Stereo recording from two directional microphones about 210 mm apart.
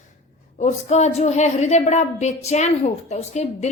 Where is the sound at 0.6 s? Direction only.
35° left (ahead or behind).